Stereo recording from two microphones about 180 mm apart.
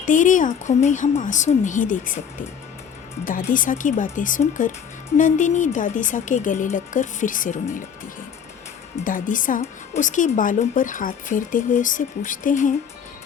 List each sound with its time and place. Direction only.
0.0 s speech: 45° left (ahead or behind)
3.2 s speech: 50° left (ahead or behind)
9.0 s speech: 50° left (ahead or behind)